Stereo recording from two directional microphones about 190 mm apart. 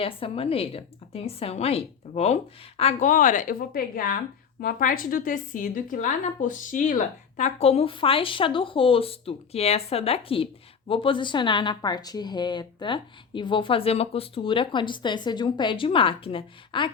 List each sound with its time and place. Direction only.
0.0 s a woman's voice: 30° left (ahead or behind)